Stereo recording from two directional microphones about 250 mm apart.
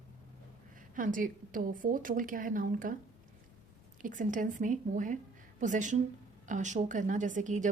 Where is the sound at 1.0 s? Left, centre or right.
Right.